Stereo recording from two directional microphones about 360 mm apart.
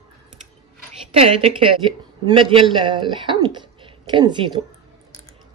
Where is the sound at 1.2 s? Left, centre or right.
Centre.